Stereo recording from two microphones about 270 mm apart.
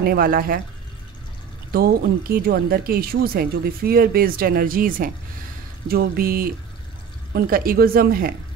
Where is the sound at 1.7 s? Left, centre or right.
Right.